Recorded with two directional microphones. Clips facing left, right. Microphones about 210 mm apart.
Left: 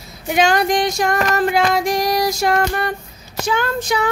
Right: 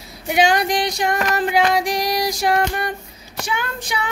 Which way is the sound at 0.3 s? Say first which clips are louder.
Left 2 dB; 15° right (ahead or behind).